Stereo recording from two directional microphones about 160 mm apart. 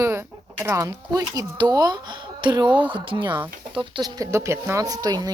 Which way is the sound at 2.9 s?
30° right (ahead or behind).